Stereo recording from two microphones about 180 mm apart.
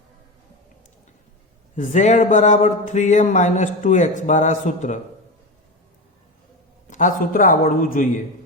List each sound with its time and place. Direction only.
1.7 s speech: 40° left (ahead or behind)
6.9 s a man's voice: 45° left (ahead or behind)